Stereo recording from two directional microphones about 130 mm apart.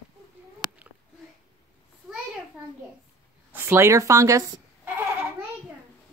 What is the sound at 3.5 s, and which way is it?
Speech, 20° right (ahead or behind).